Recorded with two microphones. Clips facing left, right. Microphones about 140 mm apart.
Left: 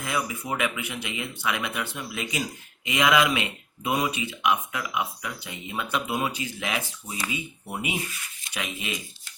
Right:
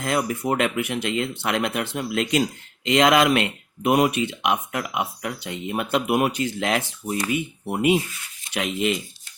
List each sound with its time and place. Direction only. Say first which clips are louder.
0.0 s speech: right 6 dB; 75° right (ahead or behind)
7.8 s speech: right 12 dB; 90° right
8.5 s speech: right 10 dB; 75° right (ahead or behind)